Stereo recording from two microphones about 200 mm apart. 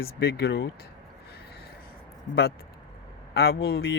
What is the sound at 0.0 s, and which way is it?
Speech, 50° left (ahead or behind).